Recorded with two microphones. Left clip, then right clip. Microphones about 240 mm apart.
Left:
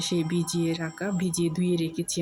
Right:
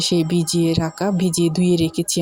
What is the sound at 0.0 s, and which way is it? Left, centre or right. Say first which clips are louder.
Speech: right 9 dB; right.